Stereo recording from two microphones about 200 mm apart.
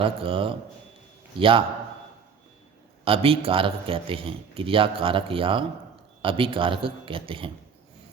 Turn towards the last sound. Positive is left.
turn(degrees=-25)  # may be behind; listen again after turning